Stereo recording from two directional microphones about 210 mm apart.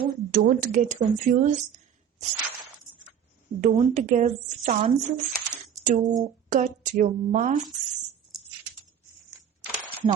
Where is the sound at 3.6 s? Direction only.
35° right (ahead or behind).